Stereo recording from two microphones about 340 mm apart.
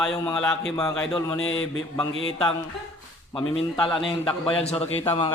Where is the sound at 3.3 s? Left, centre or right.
Centre.